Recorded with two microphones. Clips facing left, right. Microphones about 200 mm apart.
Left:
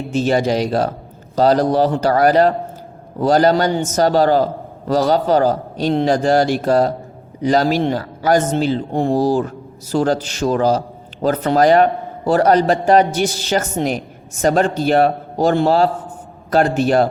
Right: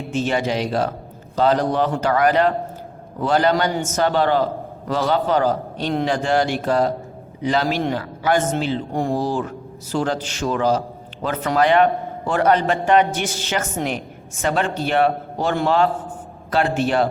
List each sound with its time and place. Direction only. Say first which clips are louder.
0.1 s a man's voice: left 5 dB; 40° left (ahead or behind)